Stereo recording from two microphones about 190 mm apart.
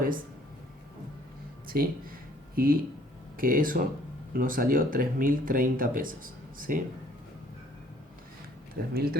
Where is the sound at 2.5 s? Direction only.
50° right (ahead or behind).